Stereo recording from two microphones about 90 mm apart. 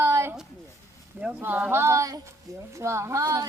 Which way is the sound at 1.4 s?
20° right (ahead or behind).